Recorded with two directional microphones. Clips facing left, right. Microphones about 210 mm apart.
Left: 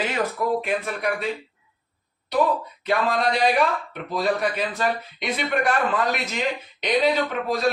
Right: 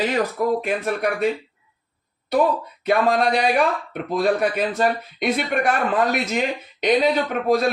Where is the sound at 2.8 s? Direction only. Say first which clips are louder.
Right 4 dB; 50° right (ahead or behind).